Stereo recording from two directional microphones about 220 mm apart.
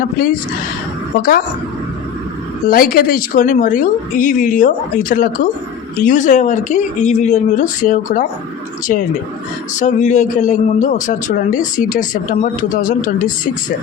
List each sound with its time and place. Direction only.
2.6 s a man's voice: 40° left (ahead or behind)